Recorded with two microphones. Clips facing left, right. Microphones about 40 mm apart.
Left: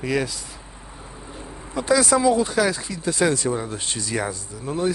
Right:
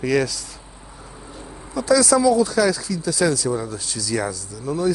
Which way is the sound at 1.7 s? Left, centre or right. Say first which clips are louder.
Right 2 dB; left.